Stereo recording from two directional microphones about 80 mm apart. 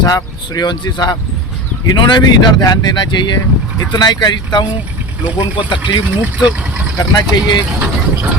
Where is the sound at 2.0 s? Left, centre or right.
Left.